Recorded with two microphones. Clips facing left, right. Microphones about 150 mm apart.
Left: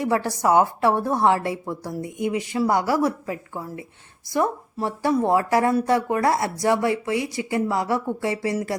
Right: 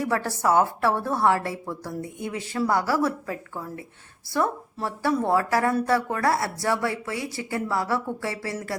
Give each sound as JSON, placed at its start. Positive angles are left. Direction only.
{"t": 0.0, "sound": "a woman's voice", "side_deg": 15}